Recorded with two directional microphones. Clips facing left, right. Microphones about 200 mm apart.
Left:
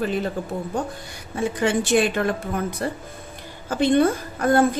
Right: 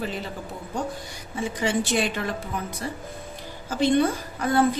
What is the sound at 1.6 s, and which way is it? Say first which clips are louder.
A woman's voice: left 5 dB; 55° left (ahead or behind).